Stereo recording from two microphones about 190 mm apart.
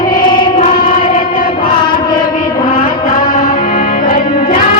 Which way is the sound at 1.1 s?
45° left (ahead or behind).